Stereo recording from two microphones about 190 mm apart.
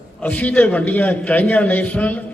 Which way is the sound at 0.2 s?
10° left (ahead or behind).